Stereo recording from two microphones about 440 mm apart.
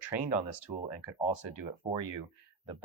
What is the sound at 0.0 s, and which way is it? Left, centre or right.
Speech, left.